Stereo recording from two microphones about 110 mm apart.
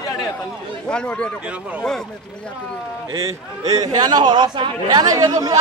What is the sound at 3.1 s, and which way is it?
A man's voice, 35° right (ahead or behind).